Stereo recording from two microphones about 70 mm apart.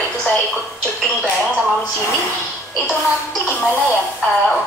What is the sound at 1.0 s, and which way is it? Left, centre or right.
Speech, centre.